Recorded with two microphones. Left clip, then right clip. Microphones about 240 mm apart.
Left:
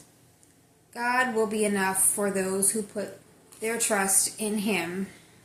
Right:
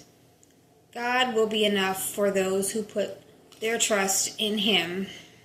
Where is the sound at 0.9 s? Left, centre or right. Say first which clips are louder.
Right 1 dB; centre.